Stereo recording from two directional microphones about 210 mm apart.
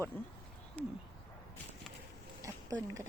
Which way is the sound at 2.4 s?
15° right (ahead or behind).